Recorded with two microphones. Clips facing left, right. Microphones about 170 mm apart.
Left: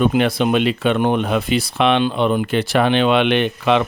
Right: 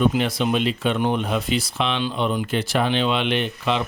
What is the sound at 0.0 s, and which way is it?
Speech, 60° left (ahead or behind).